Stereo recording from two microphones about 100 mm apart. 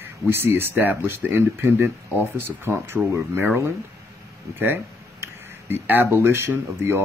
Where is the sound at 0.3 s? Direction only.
25° right (ahead or behind).